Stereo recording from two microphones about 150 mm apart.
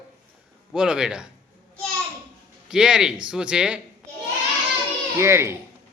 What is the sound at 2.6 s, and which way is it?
Speech, 5° right (ahead or behind).